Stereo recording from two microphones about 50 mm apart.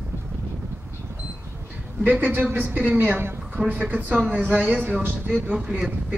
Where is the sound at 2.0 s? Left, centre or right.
Right.